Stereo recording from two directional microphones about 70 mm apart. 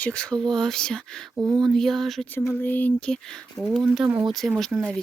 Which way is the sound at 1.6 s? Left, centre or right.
Centre.